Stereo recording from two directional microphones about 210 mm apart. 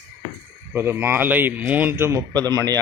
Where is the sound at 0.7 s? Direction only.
10° right (ahead or behind).